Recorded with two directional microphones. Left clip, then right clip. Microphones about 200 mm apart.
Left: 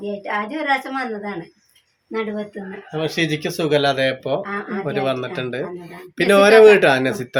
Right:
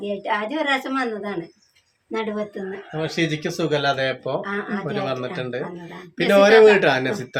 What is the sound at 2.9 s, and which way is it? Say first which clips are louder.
Speech: left 3 dB; 40° left (ahead or behind).